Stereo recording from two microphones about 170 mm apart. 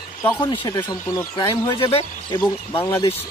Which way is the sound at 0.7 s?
20° left (ahead or behind).